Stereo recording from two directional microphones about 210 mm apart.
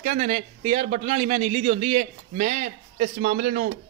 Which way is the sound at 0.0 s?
35° right (ahead or behind).